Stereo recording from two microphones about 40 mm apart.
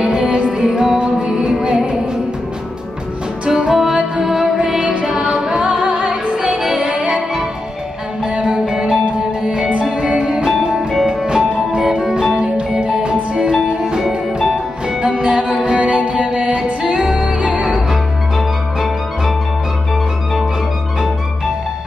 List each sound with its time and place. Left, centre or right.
0.0 s music: right
3.4 s music: centre
8.2 s music: centre
11.1 s music: right
14.0 s music: centre
15.0 s music: right